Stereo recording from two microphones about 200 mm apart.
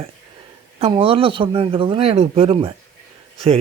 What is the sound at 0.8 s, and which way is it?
Speech, 25° right (ahead or behind).